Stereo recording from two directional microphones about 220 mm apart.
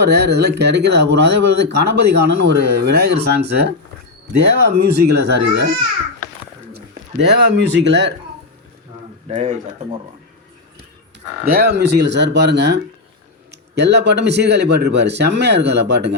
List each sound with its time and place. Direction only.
0.0 s speech: 50° right (ahead or behind)
6.7 s speech: 50° right (ahead or behind)
9.2 s speech: 30° right (ahead or behind)
11.5 s speech: 50° right (ahead or behind)